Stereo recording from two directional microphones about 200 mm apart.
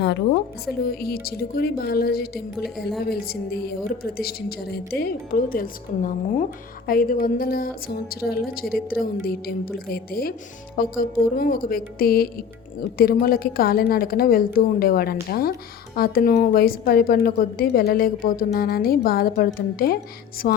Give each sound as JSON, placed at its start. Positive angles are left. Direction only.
{"t": 0.6, "sound": "a woman's voice", "side_deg": 50}